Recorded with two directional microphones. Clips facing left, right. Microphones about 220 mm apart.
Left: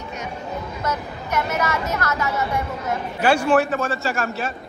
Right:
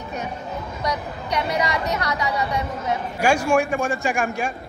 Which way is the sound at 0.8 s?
15° right (ahead or behind).